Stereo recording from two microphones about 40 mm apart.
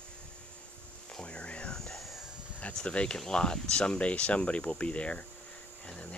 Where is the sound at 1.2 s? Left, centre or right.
Left.